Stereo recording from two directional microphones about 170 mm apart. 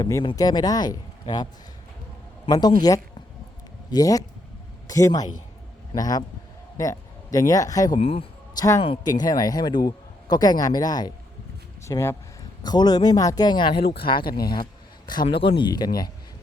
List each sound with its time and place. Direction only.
0.0 s speech: 20° left (ahead or behind)
2.5 s speech: 25° left (ahead or behind)
3.9 s speech: 20° left (ahead or behind)
7.9 s a man's voice: 35° left (ahead or behind)